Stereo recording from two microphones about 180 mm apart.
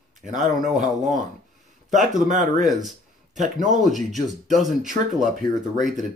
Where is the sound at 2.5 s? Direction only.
Centre (ahead or behind).